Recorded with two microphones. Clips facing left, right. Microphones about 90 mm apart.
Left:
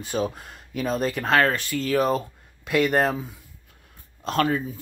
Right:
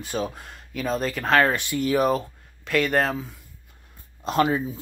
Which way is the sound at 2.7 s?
5° left (ahead or behind).